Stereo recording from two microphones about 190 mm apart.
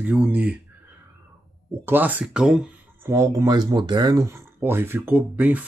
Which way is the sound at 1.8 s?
10° right (ahead or behind).